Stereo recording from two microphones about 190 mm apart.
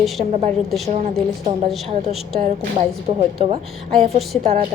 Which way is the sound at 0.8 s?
40° right (ahead or behind).